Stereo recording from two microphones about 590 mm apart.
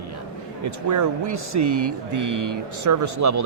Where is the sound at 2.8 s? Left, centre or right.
Right.